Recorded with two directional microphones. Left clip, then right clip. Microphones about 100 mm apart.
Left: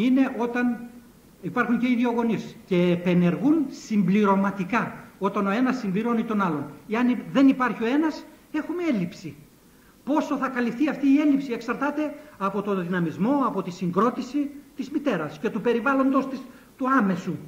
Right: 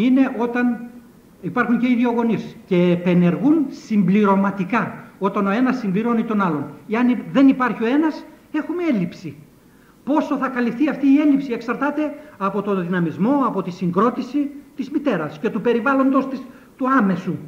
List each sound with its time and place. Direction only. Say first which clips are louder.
0.0 s a man's voice: right 5 dB; 30° left (ahead or behind)